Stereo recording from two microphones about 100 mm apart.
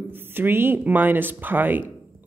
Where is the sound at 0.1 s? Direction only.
20° right (ahead or behind).